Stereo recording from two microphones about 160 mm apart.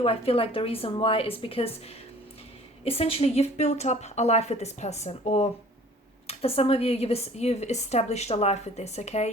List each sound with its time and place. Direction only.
0.0 s a woman's voice: 35° left (ahead or behind)
2.8 s a woman's voice: 40° left (ahead or behind)